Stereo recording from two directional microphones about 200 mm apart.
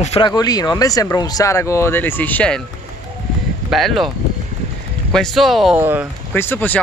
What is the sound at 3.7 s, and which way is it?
Speech, centre (ahead or behind).